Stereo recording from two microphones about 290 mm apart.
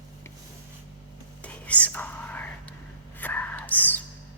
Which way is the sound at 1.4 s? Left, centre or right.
Centre.